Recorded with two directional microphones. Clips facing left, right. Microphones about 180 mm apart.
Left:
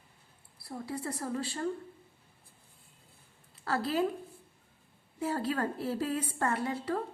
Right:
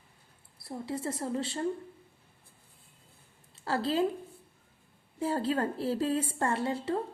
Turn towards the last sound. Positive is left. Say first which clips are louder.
# right 2 dB
turn(degrees=-25)  # may be behind; listen again after turning